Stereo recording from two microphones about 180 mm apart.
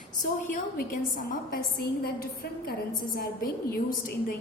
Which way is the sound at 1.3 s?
55° left (ahead or behind).